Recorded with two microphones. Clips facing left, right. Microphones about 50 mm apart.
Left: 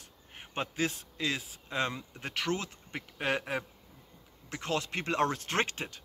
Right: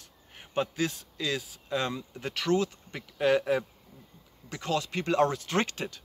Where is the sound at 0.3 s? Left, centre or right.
Left.